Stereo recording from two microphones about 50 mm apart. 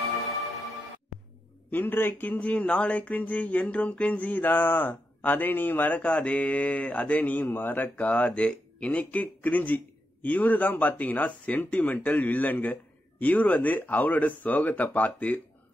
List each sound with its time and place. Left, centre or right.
1.7 s speech: left